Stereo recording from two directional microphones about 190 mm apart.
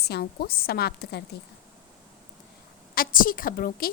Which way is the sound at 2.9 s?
50° left (ahead or behind).